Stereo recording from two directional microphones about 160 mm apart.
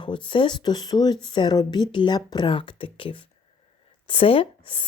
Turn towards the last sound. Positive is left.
turn(degrees=35)  # may be behind; listen again after turning